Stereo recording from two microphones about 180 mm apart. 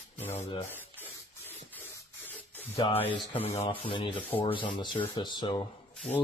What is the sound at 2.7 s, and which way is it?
Speech, 30° left (ahead or behind).